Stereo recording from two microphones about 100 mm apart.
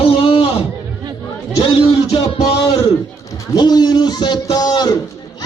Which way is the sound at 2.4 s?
40° left (ahead or behind).